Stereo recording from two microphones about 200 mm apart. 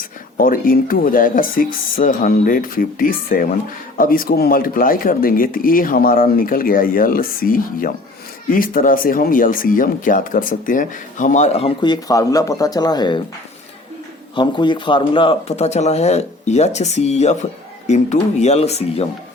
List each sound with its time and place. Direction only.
0.3 s speech: 45° left (ahead or behind); by 13.2 s 20° left (ahead or behind)
14.3 s speech: 25° left (ahead or behind)